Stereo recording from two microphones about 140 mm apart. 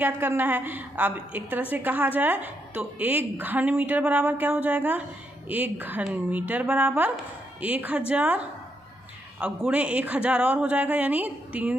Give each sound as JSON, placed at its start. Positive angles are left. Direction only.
{"t": 0.0, "sound": "a woman's voice", "side_deg": -15}